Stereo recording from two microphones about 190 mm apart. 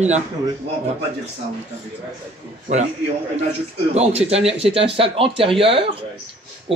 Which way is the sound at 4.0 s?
35° right (ahead or behind).